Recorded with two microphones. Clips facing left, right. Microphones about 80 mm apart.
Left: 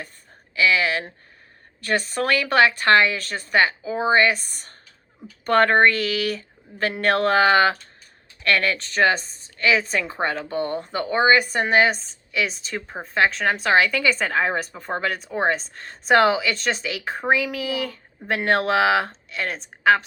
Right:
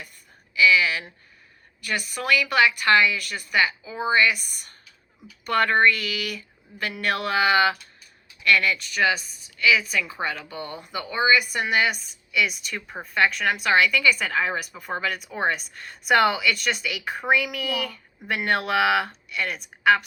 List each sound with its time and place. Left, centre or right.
0.5 s speech: left